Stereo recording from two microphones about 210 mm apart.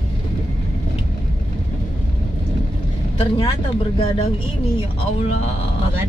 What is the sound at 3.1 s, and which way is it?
Speech, 25° left (ahead or behind).